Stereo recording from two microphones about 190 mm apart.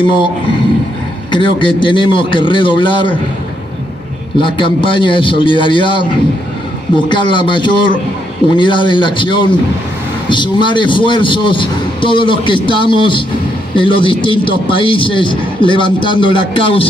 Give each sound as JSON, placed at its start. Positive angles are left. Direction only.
{"t": 0.0, "sound": "a man's voice", "side_deg": 25}
{"t": 1.3, "sound": "a man's voice", "side_deg": 25}
{"t": 4.4, "sound": "a man's voice", "side_deg": 25}
{"t": 7.1, "sound": "a man's voice", "side_deg": 25}